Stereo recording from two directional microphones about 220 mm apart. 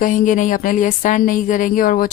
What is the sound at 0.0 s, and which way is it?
Speech, 35° left (ahead or behind).